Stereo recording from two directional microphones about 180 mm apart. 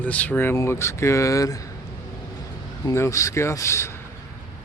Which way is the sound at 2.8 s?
15° left (ahead or behind).